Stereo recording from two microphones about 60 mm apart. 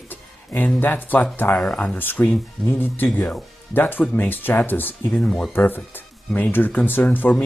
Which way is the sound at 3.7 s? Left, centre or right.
Left.